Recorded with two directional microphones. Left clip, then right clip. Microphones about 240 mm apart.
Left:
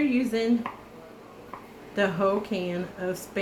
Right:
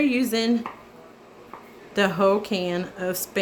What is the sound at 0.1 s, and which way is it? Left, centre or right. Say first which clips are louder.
Speech: right 3 dB; right.